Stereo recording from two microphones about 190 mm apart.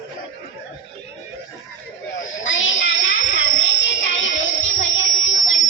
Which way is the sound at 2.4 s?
85° left.